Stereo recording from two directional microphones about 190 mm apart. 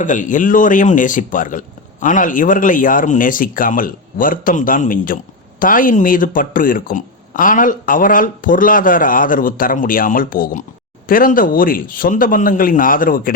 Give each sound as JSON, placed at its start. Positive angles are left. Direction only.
{"t": 0.0, "sound": "speech", "side_deg": 40}